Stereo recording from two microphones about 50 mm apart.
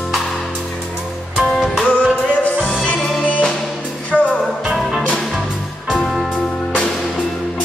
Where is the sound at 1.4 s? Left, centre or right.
Centre.